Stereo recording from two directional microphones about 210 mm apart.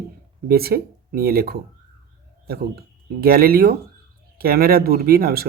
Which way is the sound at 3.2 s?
45° right (ahead or behind).